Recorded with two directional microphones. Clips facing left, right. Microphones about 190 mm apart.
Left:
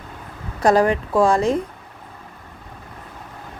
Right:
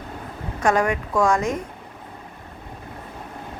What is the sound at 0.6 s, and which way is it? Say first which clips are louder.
Speech: left 4 dB; 35° left (ahead or behind).